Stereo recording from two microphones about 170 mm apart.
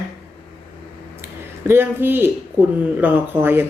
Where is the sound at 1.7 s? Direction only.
15° right (ahead or behind).